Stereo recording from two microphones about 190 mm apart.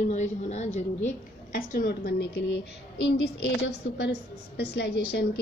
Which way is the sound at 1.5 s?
55° left (ahead or behind).